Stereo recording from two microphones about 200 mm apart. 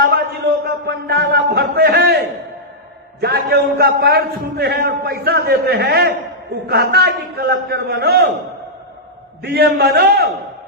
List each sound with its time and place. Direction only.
0.0 s a sound: 50° right (ahead or behind)
3.2 s a man's voice: 50° right (ahead or behind)
9.4 s a man's voice: 55° right (ahead or behind)